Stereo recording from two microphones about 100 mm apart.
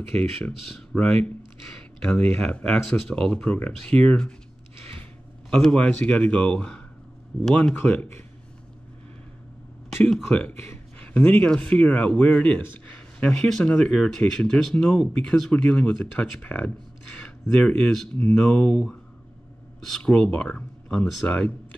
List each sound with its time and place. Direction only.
0.9 s speech: 10° left (ahead or behind)
5.5 s speech: 10° left (ahead or behind)
7.7 s speech: 15° left (ahead or behind)
10.3 s speech: 15° left (ahead or behind)